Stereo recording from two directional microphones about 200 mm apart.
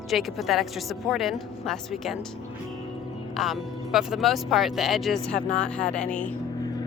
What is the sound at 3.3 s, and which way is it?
Speech, centre (ahead or behind).